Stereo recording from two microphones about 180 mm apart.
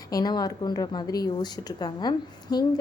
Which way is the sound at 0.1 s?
20° left (ahead or behind).